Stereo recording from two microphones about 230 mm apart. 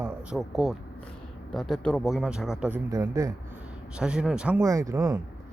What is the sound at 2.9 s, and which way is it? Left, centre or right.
Speech, centre.